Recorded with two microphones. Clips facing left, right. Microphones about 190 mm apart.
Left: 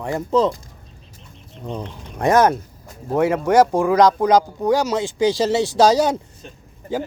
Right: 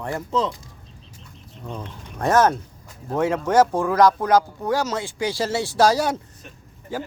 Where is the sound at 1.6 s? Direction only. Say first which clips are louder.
Left 5 dB; 15° left (ahead or behind).